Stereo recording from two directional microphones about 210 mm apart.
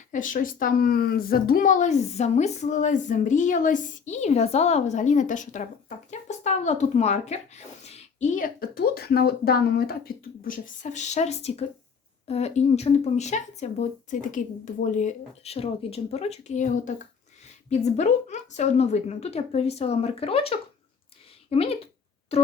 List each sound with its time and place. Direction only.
0.1 s a woman's voice: 40° left (ahead or behind)